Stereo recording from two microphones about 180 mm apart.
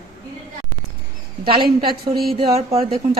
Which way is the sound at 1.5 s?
30° right (ahead or behind).